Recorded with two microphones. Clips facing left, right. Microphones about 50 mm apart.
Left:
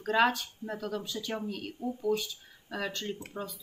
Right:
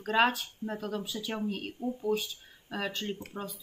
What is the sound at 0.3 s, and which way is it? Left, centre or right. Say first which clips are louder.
Speech: even; centre.